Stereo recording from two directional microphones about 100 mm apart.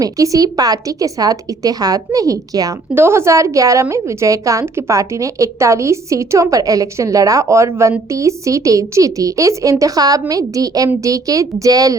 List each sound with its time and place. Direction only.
0.0 s a woman's voice: 35° right (ahead or behind)
2.9 s a woman's voice: 25° right (ahead or behind)